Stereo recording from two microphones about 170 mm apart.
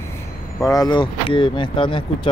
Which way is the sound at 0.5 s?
20° left (ahead or behind).